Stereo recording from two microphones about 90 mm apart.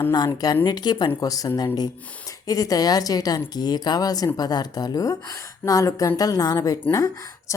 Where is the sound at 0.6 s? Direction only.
50° left (ahead or behind).